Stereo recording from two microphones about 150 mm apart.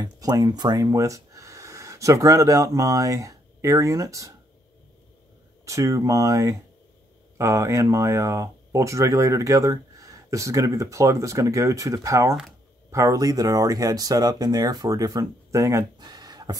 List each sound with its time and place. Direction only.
0.0 s speech: 25° right (ahead or behind)
5.7 s speech: 20° right (ahead or behind)